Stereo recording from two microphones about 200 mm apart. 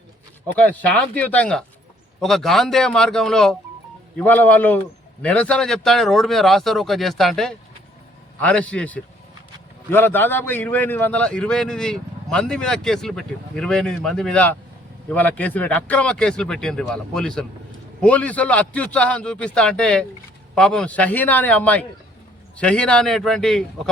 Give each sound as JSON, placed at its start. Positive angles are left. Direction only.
{"t": 0.4, "sound": "a man's voice", "side_deg": 5}